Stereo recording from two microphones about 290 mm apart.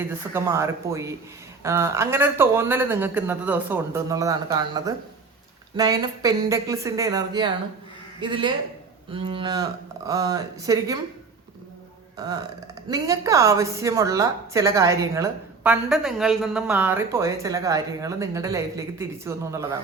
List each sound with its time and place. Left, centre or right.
0.0 s a woman's voice: centre
12.1 s a woman's voice: centre